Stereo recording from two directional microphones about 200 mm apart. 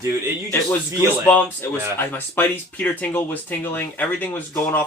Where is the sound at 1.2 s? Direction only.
10° left (ahead or behind).